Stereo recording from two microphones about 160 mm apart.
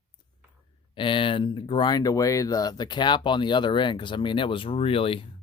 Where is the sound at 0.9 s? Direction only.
30° left (ahead or behind).